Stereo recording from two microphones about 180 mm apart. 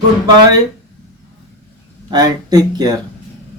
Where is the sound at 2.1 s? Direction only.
20° right (ahead or behind).